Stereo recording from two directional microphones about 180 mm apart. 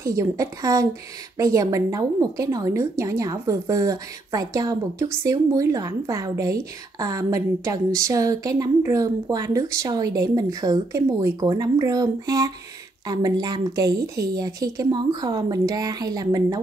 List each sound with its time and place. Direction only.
0.0 s a woman's voice: 15° right (ahead or behind)